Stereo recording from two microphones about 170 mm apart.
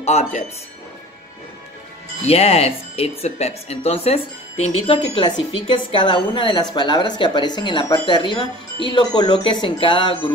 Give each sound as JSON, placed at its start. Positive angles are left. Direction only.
{"t": 0.0, "sound": "speech", "side_deg": 40}
{"t": 2.2, "sound": "speech", "side_deg": 35}